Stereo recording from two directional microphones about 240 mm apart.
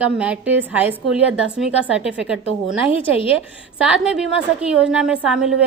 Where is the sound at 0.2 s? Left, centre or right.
Centre.